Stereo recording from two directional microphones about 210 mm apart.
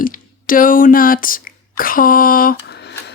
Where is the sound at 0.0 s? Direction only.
40° left (ahead or behind).